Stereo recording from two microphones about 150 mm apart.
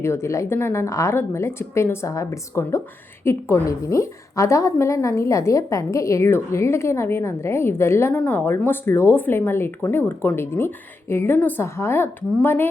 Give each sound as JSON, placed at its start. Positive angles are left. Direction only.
{"t": 0.0, "sound": "a woman's voice", "side_deg": 15}